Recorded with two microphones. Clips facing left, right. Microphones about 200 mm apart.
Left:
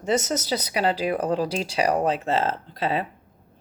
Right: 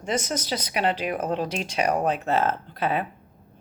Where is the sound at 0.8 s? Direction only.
35° left (ahead or behind).